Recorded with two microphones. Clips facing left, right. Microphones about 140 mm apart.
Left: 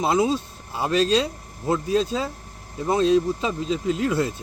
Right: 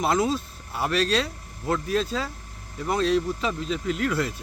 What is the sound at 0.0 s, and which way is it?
Speech, 20° left (ahead or behind).